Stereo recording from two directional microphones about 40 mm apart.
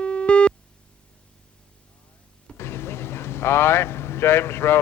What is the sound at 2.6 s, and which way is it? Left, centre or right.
Vehicle, left.